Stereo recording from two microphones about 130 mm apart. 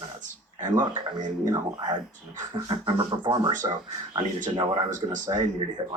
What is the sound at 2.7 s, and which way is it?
Speech, 40° right (ahead or behind).